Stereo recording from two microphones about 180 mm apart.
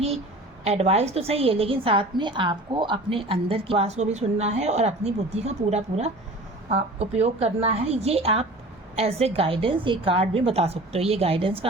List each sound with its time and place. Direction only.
0.6 s a woman's voice: 35° right (ahead or behind)